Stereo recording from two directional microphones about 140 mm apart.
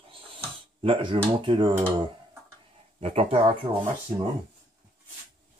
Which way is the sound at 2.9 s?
45° right (ahead or behind).